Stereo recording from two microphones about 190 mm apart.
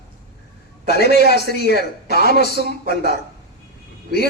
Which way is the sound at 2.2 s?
50° right (ahead or behind).